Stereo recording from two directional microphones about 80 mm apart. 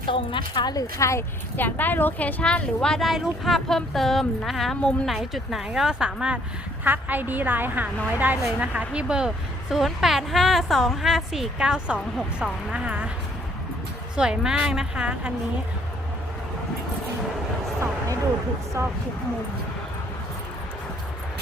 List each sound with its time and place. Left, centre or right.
0.0 s a woman's voice: left
0.7 s speech: left
1.5 s a woman's voice: left; by 5.1 s centre
5.1 s speech: centre
6.8 s a woman's voice: right
14.2 s speech: centre
18.8 s speech: right